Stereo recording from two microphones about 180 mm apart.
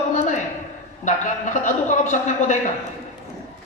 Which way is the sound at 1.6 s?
40° left (ahead or behind).